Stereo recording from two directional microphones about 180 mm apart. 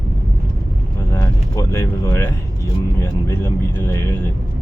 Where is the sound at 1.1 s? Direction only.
15° left (ahead or behind).